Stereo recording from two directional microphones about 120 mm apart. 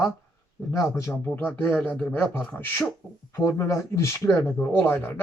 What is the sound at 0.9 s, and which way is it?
Speech, 25° left (ahead or behind).